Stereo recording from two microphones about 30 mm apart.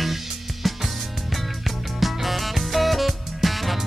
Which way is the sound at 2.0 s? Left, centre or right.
Centre.